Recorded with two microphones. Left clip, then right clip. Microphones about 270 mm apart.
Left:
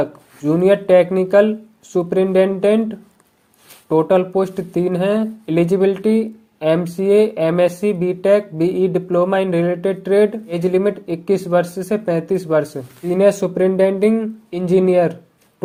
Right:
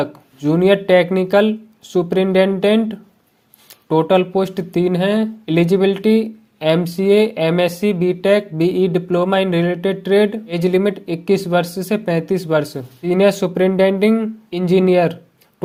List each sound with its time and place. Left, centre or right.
0.0 s speech: right